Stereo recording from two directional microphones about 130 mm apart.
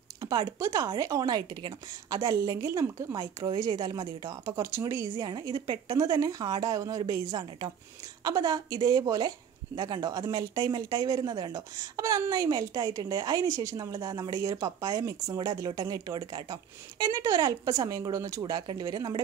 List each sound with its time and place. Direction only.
0.2 s speech: 30° right (ahead or behind)
5.1 s a woman's voice: 35° right (ahead or behind)